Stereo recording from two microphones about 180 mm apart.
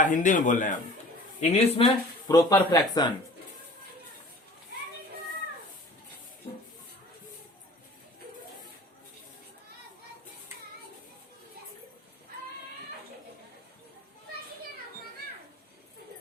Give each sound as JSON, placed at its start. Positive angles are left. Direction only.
{"t": 0.0, "sound": "speech", "side_deg": 45}